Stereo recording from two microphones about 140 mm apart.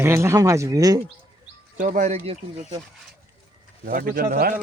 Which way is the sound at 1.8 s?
70° right (ahead or behind).